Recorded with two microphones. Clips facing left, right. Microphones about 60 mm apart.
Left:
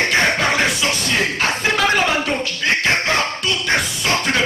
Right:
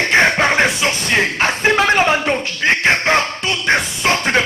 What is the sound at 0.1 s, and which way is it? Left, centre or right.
Music, right.